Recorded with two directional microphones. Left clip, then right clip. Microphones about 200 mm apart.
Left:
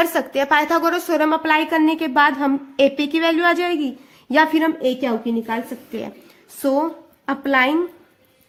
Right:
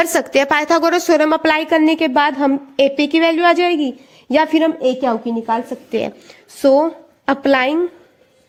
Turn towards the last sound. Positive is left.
turn(degrees=-40)  # may be behind; listen again after turning